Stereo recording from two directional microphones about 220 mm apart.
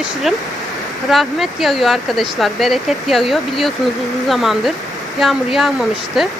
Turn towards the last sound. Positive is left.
turn(degrees=0)  # may be behind; listen again after turning